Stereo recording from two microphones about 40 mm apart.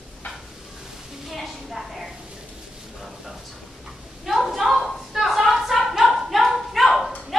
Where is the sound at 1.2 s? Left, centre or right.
Centre.